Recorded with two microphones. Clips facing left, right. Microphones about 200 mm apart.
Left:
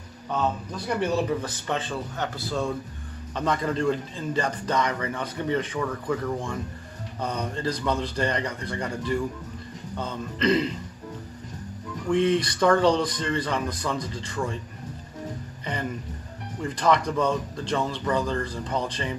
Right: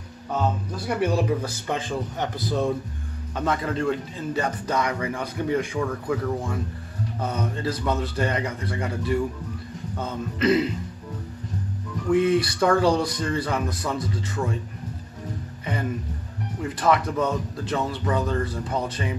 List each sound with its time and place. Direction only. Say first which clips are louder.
0.8 s a man's voice: right 2 dB; 10° right (ahead or behind)
3.3 s a man's voice: even; 5° right (ahead or behind)
12.1 s a man's voice: right 2 dB; 5° right (ahead or behind)
16.6 s speech: right 1 dB; 5° right (ahead or behind)